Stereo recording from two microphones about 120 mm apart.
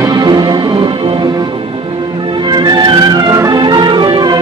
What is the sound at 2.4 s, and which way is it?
Music, 35° right (ahead or behind).